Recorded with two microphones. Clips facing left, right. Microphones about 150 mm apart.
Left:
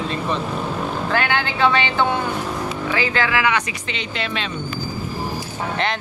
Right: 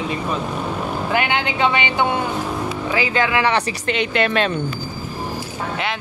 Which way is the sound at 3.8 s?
55° right (ahead or behind).